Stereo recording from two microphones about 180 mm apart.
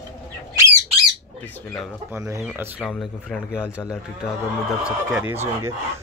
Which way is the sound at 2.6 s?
Centre (ahead or behind).